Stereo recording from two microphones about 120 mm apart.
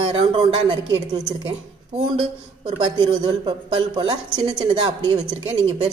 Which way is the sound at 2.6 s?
50° right (ahead or behind).